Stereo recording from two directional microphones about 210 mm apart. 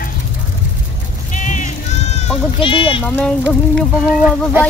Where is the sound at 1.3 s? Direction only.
35° left (ahead or behind).